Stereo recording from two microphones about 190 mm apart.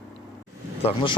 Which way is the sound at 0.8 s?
25° left (ahead or behind).